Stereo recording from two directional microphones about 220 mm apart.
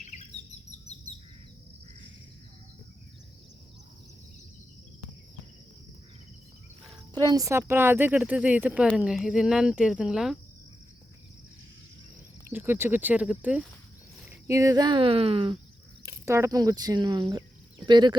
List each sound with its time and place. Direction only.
0.0 s bird: 30° left (ahead or behind)
7.1 s speech: 20° right (ahead or behind); by 10.3 s 5° right (ahead or behind)
12.5 s speech: 10° right (ahead or behind)
16.0 s speech: 10° right (ahead or behind)